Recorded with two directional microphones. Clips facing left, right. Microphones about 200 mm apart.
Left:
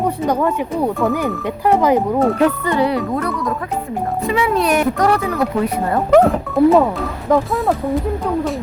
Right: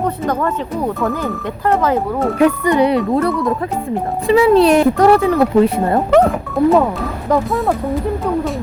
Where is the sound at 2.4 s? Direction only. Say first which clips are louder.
Right 3 dB; 15° right (ahead or behind).